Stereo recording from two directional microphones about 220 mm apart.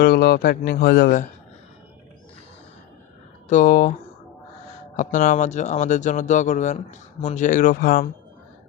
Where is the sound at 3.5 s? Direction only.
35° left (ahead or behind).